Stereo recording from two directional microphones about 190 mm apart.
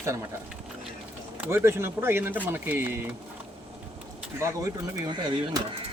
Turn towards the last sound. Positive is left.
turn(degrees=-20)  # may be behind; listen again after turning